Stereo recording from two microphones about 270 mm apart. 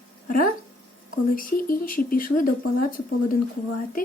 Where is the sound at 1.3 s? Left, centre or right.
Left.